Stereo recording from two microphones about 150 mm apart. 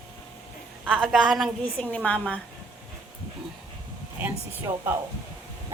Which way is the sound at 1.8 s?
10° left (ahead or behind).